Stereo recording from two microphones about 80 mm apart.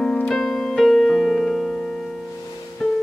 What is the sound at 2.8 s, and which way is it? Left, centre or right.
Music, centre.